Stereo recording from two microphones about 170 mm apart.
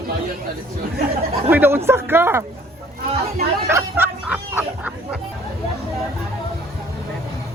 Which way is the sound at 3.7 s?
10° right (ahead or behind).